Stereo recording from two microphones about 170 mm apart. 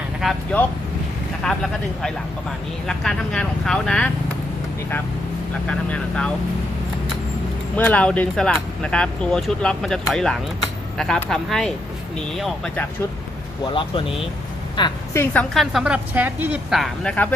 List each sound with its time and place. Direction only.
1.5 s speech: 5° left (ahead or behind)
2.8 s speech: 5° left (ahead or behind)
5.6 s speech: 5° left (ahead or behind)
7.8 s speech: 5° left (ahead or behind)
13.7 s a woman's voice: 30° left (ahead or behind)
15.2 s speech: 10° left (ahead or behind)